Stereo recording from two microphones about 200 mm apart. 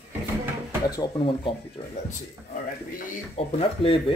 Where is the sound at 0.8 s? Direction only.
20° left (ahead or behind).